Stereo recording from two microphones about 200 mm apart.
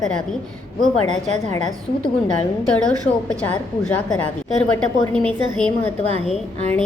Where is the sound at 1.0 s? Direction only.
35° right (ahead or behind).